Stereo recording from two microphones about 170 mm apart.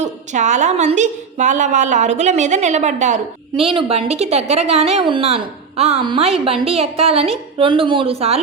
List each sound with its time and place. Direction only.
0.0 s a woman's voice: 45° right (ahead or behind)
3.5 s a woman's voice: 30° right (ahead or behind)